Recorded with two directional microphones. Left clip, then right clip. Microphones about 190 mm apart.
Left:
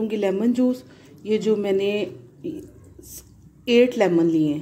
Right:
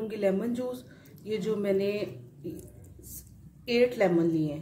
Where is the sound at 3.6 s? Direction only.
40° left (ahead or behind).